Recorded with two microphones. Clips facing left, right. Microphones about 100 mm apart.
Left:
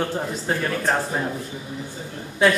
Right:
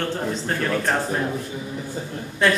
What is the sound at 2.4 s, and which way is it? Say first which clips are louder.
Speech: left 2 dB; 5° left (ahead or behind).